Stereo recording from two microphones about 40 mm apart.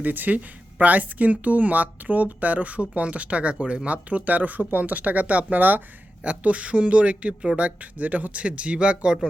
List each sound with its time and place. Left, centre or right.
0.0 s speech: right
6.2 s speech: right